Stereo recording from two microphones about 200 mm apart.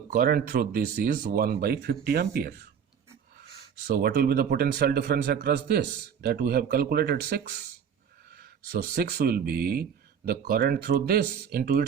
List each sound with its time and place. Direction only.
0.1 s a man's voice: 45° right (ahead or behind)
3.8 s a man's voice: 50° right (ahead or behind)